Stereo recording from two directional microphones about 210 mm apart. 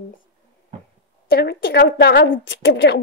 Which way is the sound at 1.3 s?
50° left (ahead or behind).